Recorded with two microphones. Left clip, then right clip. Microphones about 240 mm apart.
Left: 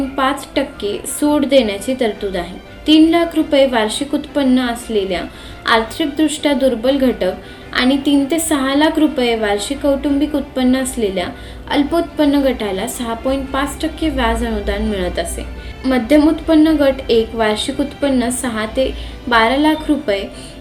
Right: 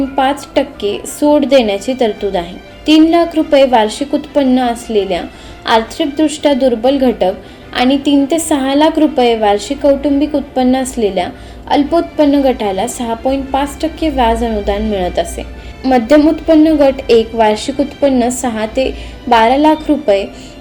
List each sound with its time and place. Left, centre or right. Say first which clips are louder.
0.2 s a woman's voice: right 4 dB; centre
16.8 s a woman's voice: right 4 dB; right
17.5 s a woman's voice: right 4 dB; centre